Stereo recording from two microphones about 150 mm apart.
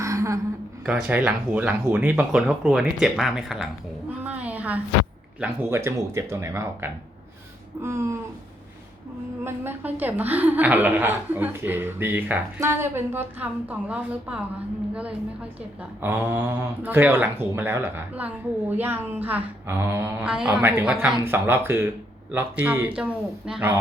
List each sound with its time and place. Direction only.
0.0 s a sound: 20° right (ahead or behind)
0.9 s a woman's voice: 10° right (ahead or behind)
4.2 s a sound: 10° right (ahead or behind)
5.4 s a woman's voice: 5° right (ahead or behind)
5.7 s a woman's voice: 15° right (ahead or behind)
9.4 s a woman's voice: 15° right (ahead or behind)
16.0 s a woman's voice: 15° right (ahead or behind)